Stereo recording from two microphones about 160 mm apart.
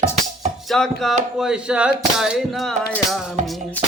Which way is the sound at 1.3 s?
5° right (ahead or behind).